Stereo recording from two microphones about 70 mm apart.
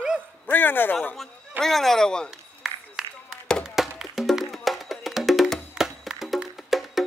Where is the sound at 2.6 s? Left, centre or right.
Centre.